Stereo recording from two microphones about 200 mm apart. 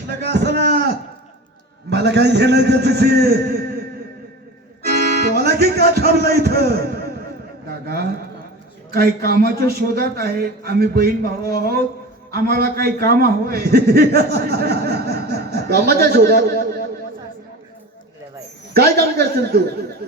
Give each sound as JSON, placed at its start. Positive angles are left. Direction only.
{"t": 0.2, "sound": "a man's voice", "side_deg": -55}
{"t": 1.9, "sound": "a man's voice", "side_deg": -60}
{"t": 4.9, "sound": "music", "side_deg": -55}
{"t": 7.7, "sound": "a sound", "side_deg": -50}
{"t": 8.9, "sound": "a man's voice", "side_deg": -50}
{"t": 18.7, "sound": "a man's voice", "side_deg": -50}